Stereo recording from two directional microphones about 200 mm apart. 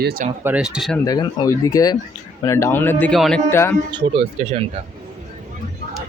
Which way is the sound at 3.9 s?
25° right (ahead or behind).